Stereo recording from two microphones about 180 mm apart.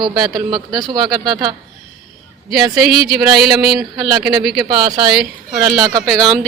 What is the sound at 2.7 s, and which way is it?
Speech, centre (ahead or behind).